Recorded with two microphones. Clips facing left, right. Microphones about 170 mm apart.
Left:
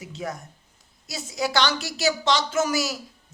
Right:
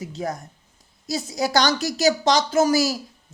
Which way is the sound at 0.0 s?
35° right (ahead or behind).